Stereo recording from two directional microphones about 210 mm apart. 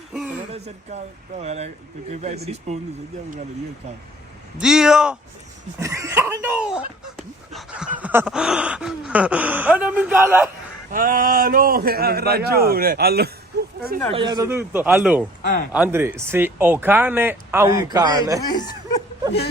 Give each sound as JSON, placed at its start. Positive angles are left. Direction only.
{"t": 0.1, "sound": "a sound", "side_deg": 0}
{"t": 0.5, "sound": "speech", "side_deg": -30}
{"t": 4.5, "sound": "speech", "side_deg": -5}
{"t": 5.8, "sound": "gasp", "side_deg": -15}
{"t": 10.9, "sound": "a man's voice", "side_deg": -40}
{"t": 13.5, "sound": "a sound", "side_deg": -50}
{"t": 14.1, "sound": "gasp", "side_deg": -20}
{"t": 18.4, "sound": "speech", "side_deg": 20}